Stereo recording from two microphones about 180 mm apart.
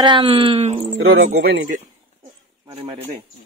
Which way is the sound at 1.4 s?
55° right (ahead or behind).